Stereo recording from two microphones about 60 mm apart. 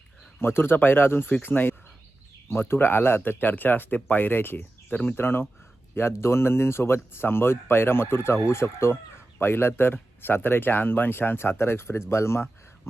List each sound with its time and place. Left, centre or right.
0.3 s speech: left
3.2 s speech: left